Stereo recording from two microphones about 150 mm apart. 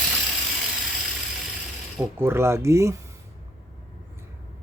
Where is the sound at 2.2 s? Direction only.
15° right (ahead or behind).